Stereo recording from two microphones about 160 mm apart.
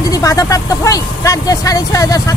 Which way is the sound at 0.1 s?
20° left (ahead or behind).